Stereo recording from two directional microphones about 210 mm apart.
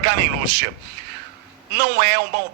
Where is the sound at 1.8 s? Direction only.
50° right (ahead or behind).